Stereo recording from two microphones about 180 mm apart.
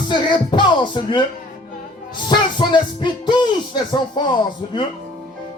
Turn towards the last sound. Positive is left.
turn(degrees=25)  # may be behind; listen again after turning